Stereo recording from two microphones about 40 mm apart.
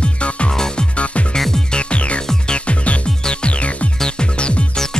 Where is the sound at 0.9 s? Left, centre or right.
Left.